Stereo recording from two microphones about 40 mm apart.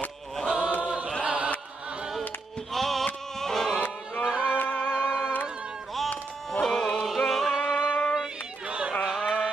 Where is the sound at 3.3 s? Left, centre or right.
Centre.